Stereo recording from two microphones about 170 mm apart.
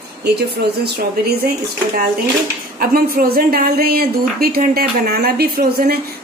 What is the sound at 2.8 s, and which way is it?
Speech, 60° right (ahead or behind).